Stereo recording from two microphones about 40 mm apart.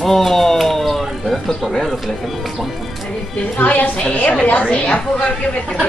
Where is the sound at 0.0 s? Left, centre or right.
Centre.